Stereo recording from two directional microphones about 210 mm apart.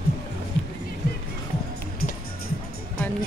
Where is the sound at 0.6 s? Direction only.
60° left (ahead or behind).